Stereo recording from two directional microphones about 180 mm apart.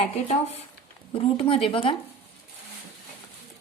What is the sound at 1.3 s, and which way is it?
Speech, 30° left (ahead or behind).